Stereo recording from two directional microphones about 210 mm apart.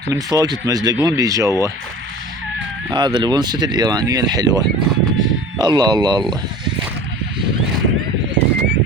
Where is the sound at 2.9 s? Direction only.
20° right (ahead or behind).